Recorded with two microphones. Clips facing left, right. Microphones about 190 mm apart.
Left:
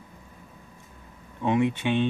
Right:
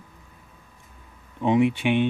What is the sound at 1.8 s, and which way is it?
Speech, 15° right (ahead or behind).